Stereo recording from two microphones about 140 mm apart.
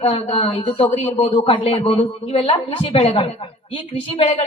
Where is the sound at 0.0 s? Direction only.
45° left (ahead or behind).